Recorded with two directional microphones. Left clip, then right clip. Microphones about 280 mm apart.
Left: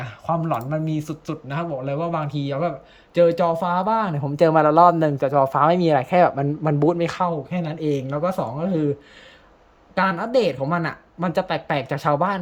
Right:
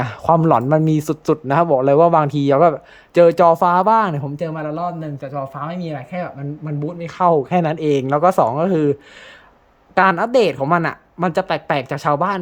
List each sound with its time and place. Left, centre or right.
0.0 s speech: right; by 4.3 s centre
4.4 s speech: centre
7.3 s a woman's voice: centre